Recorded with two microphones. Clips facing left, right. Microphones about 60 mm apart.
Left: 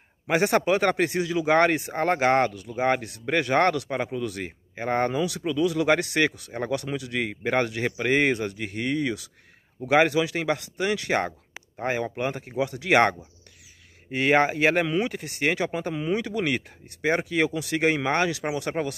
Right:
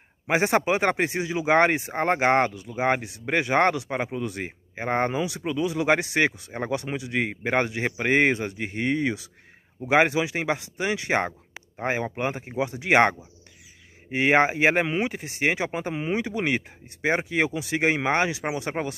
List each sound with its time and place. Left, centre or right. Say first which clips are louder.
0.3 s speech: even; right
14.1 s speech: right 1 dB; right